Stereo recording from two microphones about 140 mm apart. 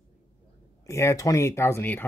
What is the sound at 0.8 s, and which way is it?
Speech, 20° left (ahead or behind).